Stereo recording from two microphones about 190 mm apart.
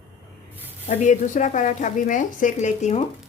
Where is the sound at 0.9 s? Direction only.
40° left (ahead or behind).